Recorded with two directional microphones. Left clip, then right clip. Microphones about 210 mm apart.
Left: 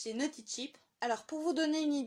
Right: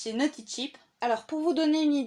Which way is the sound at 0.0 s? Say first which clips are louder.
Right 8 dB; 20° left (ahead or behind).